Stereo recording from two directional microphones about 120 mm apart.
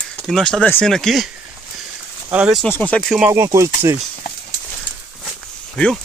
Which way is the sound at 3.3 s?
25° right (ahead or behind).